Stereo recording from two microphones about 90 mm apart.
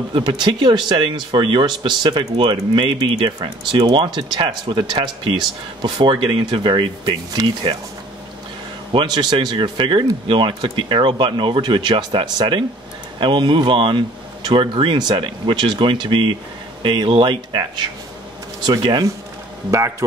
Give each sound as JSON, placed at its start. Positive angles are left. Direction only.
{"t": 0.1, "sound": "speech", "side_deg": -60}
{"t": 8.9, "sound": "speech", "side_deg": -50}
{"t": 18.8, "sound": "speech", "side_deg": -55}